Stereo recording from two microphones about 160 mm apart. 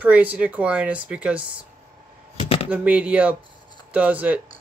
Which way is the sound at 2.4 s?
35° left (ahead or behind).